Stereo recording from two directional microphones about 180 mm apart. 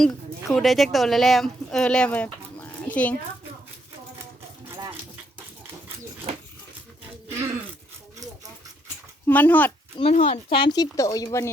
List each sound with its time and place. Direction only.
0.0 s a woman's voice: centre (ahead or behind)
9.2 s speech: 10° left (ahead or behind)
10.0 s speech: 40° left (ahead or behind)
10.5 s speech: 25° left (ahead or behind)